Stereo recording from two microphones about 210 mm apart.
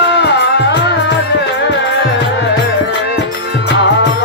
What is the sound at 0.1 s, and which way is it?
Music, 55° left (ahead or behind).